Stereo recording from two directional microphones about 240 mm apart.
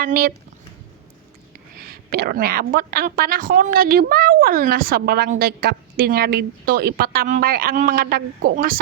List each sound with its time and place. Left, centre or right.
0.0 s a woman's voice: right
1.9 s a woman's voice: right